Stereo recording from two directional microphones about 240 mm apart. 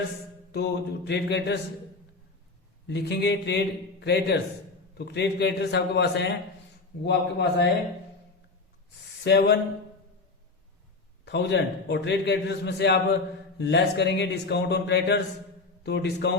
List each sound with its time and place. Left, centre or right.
0.5 s a man's voice: left
2.8 s a man's voice: left
9.2 s a man's voice: left
11.3 s a man's voice: left